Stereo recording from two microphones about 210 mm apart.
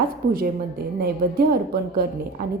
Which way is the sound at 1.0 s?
45° right (ahead or behind).